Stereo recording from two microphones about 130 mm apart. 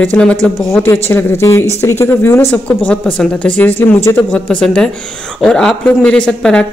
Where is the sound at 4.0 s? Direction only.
20° left (ahead or behind).